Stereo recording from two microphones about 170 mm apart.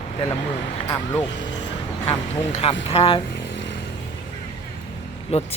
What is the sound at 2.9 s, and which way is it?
Speech, 35° left (ahead or behind).